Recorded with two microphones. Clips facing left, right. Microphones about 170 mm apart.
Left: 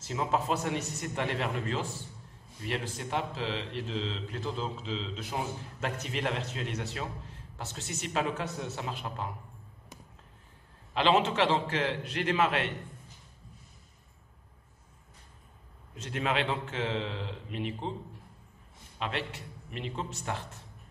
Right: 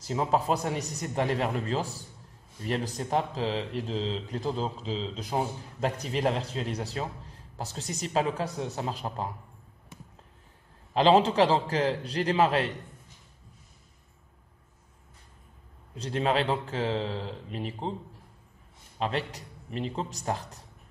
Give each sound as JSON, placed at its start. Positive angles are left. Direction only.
{"t": 0.0, "sound": "speech", "side_deg": -40}
{"t": 10.9, "sound": "speech", "side_deg": -35}
{"t": 15.9, "sound": "speech", "side_deg": -35}
{"t": 18.9, "sound": "speech", "side_deg": -40}